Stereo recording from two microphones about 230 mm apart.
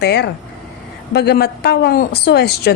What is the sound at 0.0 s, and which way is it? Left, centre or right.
Speech, left.